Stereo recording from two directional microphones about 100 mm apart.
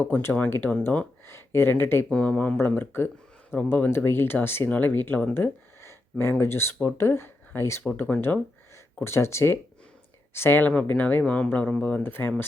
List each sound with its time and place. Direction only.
0.0 s speech: 20° left (ahead or behind)
2.0 s speech: 10° left (ahead or behind)
5.2 s a sound: 20° left (ahead or behind)
6.4 s speech: 25° left (ahead or behind)